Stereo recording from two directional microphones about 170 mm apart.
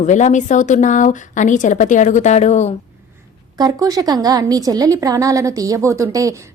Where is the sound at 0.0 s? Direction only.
45° left (ahead or behind).